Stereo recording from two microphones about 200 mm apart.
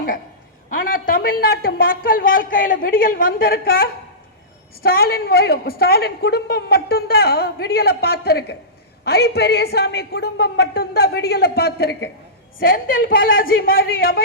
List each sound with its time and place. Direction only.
0.9 s a man's voice: 45° left (ahead or behind)